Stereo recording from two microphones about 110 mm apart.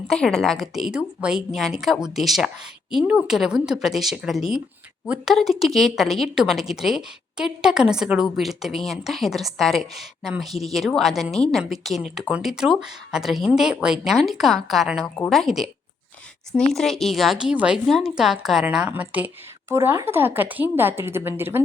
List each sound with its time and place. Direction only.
0.1 s a woman's voice: 5° left (ahead or behind); by 5.3 s 10° right (ahead or behind)
5.3 s a woman's voice: centre (ahead or behind)
16.7 s a woman's voice: centre (ahead or behind); by 21.6 s 20° right (ahead or behind)